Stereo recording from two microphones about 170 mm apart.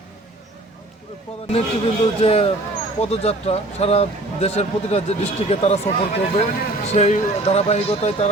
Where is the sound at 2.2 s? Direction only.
35° left (ahead or behind).